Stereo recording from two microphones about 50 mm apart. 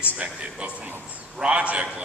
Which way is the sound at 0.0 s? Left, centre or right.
Right.